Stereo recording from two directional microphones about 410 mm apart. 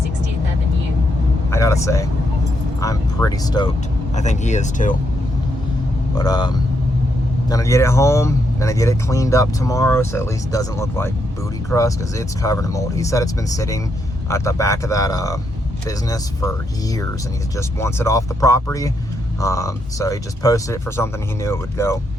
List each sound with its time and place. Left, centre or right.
1.5 s speech: centre
6.1 s speech: centre